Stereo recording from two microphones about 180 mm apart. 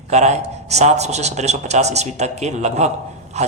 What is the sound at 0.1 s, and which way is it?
Speech, 40° right (ahead or behind).